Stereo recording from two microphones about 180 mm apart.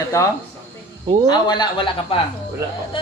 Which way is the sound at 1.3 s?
25° left (ahead or behind).